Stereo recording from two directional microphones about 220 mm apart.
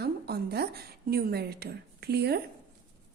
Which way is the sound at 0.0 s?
45° right (ahead or behind).